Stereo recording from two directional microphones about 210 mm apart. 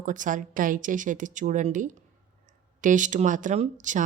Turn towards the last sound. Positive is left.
turn(degrees=-35)  # may be behind; listen again after turning